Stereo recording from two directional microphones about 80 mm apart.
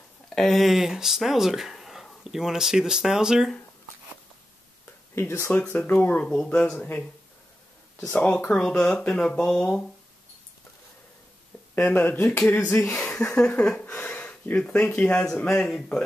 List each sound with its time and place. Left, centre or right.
0.3 s speech: centre
5.1 s speech: left; by 7.1 s centre
8.1 s speech: left
11.7 s speech: left